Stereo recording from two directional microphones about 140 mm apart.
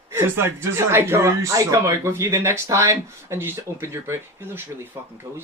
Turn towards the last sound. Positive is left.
turn(degrees=-15)  # may be behind; listen again after turning